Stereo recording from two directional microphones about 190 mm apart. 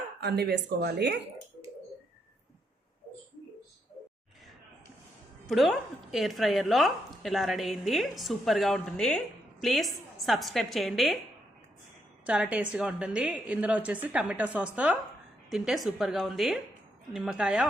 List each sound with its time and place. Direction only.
0.2 s speech: 60° right (ahead or behind)
5.5 s a woman's voice: centre (ahead or behind)
12.2 s a woman's voice: 5° right (ahead or behind)